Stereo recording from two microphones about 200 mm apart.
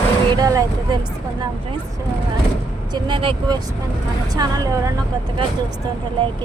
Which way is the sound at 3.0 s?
25° right (ahead or behind).